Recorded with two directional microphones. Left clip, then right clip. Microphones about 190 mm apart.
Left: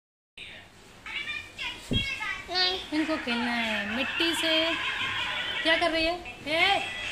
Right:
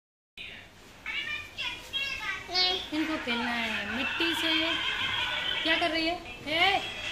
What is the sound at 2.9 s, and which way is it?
Speech, 40° left (ahead or behind).